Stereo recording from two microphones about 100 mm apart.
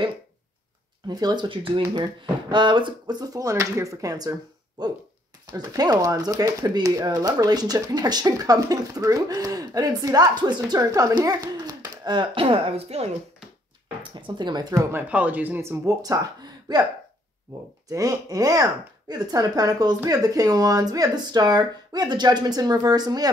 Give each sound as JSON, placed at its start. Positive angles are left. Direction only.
{"t": 1.0, "sound": "speech", "side_deg": -45}
{"t": 12.4, "sound": "speech", "side_deg": -70}
{"t": 14.2, "sound": "speech", "side_deg": -50}
{"t": 14.7, "sound": "speech", "side_deg": -30}
{"t": 15.0, "sound": "speech", "side_deg": -15}
{"t": 17.8, "sound": "speech", "side_deg": -35}